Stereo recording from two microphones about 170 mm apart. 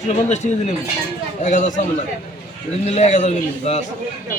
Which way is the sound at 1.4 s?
50° left (ahead or behind).